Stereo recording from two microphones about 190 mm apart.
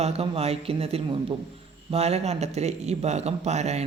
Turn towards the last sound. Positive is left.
turn(degrees=-35)  # may be behind; listen again after turning